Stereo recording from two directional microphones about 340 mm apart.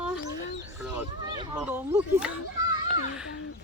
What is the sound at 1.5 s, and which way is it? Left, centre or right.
Speech, centre.